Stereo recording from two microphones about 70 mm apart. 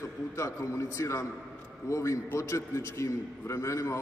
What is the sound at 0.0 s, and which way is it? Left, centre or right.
A man's voice, left.